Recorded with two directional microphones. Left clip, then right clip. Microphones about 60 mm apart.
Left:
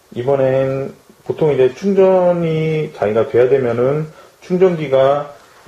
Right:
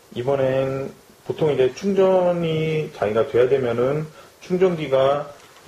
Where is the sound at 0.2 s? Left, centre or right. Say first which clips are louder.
Left 6 dB; right.